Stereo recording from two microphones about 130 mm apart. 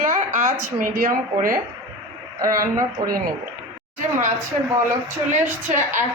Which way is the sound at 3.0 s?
30° right (ahead or behind).